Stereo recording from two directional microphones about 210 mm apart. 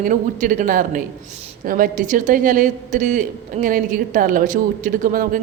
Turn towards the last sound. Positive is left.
turn(degrees=-40)  # may be behind; listen again after turning